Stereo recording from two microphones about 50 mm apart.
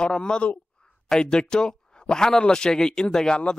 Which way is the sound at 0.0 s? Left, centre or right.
Centre.